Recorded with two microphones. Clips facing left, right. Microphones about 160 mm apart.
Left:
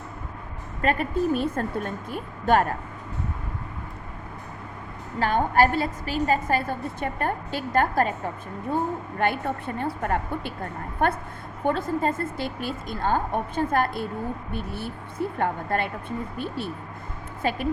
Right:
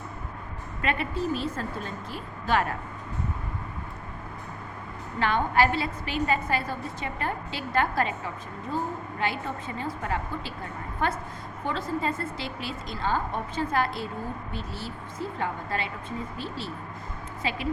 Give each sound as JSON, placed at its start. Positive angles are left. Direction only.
{"t": 0.8, "sound": "a woman's voice", "side_deg": 45}
{"t": 5.2, "sound": "a woman's voice", "side_deg": 45}